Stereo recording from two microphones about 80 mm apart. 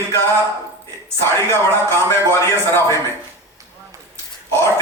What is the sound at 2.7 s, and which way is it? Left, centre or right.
Speech, left.